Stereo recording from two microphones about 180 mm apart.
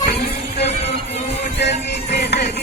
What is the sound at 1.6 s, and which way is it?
Music, 70° left (ahead or behind).